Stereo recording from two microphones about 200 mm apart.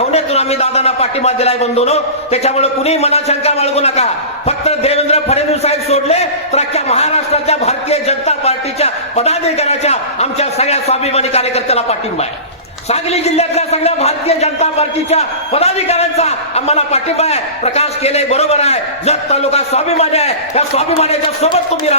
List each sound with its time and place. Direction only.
0.1 s a man's voice: 30° left (ahead or behind)